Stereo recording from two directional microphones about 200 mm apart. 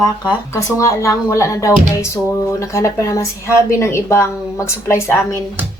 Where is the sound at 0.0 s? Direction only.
15° left (ahead or behind).